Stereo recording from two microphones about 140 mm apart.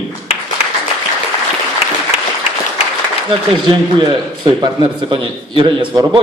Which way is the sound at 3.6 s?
35° right (ahead or behind).